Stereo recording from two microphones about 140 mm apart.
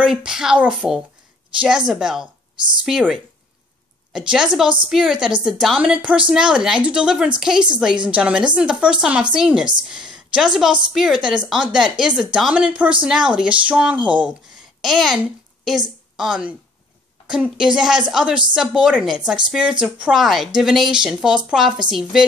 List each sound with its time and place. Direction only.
0.0 s a woman's voice: 5° right (ahead or behind)